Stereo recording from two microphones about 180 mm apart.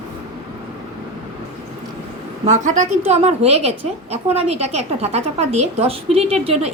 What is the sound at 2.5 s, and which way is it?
A woman's voice, 45° right (ahead or behind).